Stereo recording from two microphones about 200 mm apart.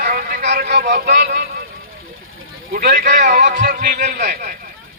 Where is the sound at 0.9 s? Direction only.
55° right (ahead or behind).